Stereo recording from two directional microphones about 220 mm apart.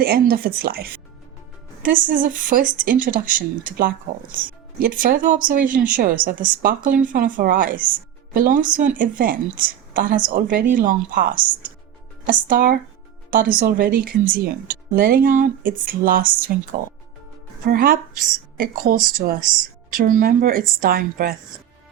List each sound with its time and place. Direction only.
0.0 s speech: 45° right (ahead or behind)